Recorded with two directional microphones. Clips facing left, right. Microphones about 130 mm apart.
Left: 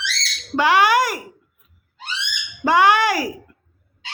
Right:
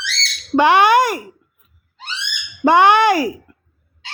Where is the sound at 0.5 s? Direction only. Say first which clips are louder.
Right 4 dB; 25° right (ahead or behind).